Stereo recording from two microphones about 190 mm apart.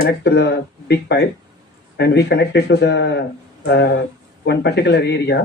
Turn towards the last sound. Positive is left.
turn(degrees=60)  # may be behind; listen again after turning